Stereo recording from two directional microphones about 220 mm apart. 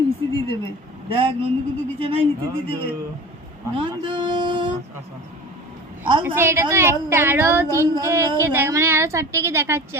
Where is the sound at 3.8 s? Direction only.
20° right (ahead or behind).